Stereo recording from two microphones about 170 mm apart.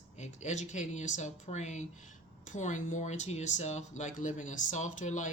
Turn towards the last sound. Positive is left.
turn(degrees=45)  # may be behind; listen again after turning